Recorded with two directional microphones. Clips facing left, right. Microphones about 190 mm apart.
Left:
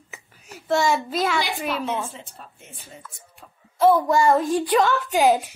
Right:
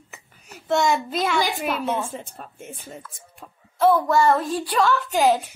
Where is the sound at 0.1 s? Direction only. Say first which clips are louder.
Left 2 dB; centre (ahead or behind).